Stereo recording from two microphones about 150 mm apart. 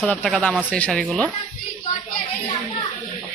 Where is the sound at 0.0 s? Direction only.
5° left (ahead or behind).